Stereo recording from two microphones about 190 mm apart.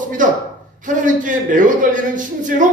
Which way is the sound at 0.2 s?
45° right (ahead or behind).